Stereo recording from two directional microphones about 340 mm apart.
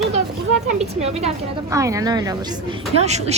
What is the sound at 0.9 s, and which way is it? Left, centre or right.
A woman's voice, centre.